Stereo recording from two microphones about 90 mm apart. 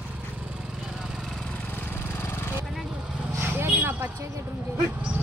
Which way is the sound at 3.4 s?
25° right (ahead or behind).